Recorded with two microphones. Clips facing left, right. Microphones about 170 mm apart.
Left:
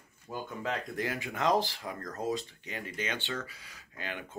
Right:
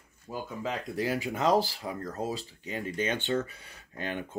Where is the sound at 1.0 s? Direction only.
40° right (ahead or behind).